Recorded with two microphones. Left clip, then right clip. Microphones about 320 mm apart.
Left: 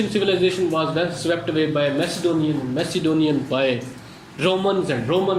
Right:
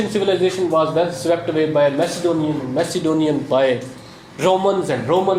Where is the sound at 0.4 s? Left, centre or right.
Centre.